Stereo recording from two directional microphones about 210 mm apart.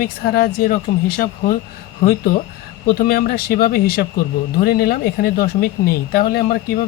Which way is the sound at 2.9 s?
45° left (ahead or behind).